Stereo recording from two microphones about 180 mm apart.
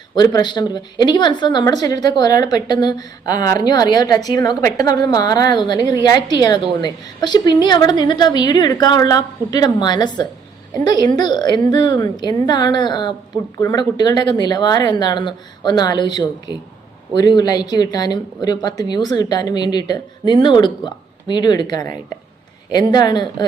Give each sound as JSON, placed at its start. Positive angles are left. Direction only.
{"t": 0.2, "sound": "speech", "side_deg": 25}